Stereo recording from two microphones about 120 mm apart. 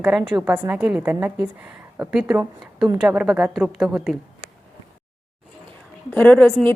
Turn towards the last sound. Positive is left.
turn(degrees=5)  # may be behind; listen again after turning